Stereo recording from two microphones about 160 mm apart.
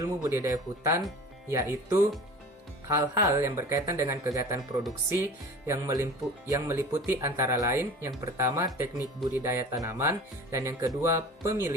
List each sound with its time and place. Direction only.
0.0 s speech: 20° right (ahead or behind)